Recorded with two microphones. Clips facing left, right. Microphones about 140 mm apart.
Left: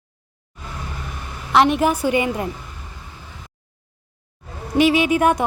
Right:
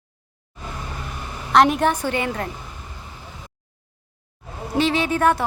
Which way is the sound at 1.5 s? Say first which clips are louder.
Even; centre (ahead or behind).